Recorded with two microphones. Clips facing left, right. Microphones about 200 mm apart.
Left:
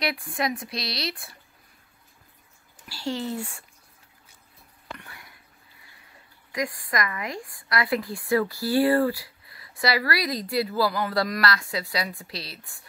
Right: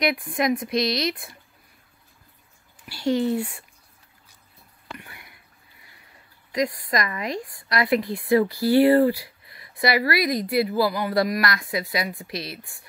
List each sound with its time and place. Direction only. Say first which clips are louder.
0.0 s speech: right 5 dB; 20° right (ahead or behind)
2.9 s speech: right 7 dB; 60° right (ahead or behind)
4.9 s a sound: right 3 dB; 15° right (ahead or behind)
6.5 s a woman's voice: right 4 dB; 20° right (ahead or behind)